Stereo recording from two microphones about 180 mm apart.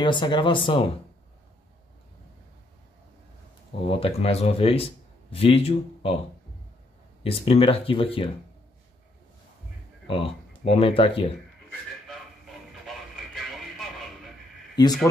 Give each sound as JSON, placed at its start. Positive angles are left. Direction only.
{"t": 0.0, "sound": "speech", "side_deg": 25}
{"t": 3.8, "sound": "speech", "side_deg": 30}
{"t": 7.2, "sound": "speech", "side_deg": 30}
{"t": 10.0, "sound": "speech", "side_deg": 30}
{"t": 12.1, "sound": "vehicle", "side_deg": 0}
{"t": 14.8, "sound": "speech", "side_deg": 25}